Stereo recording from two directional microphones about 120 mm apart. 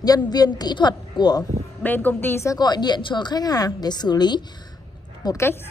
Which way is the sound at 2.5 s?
35° left (ahead or behind).